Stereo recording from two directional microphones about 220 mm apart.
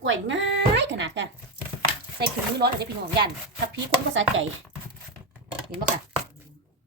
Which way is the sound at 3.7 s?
60° right (ahead or behind).